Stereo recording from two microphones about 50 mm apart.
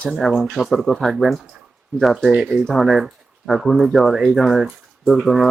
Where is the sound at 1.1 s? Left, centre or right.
Centre.